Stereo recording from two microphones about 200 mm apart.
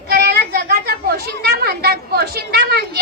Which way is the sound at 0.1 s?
50° right (ahead or behind).